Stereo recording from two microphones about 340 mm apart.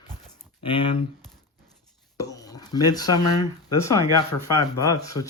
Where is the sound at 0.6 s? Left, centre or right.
Centre.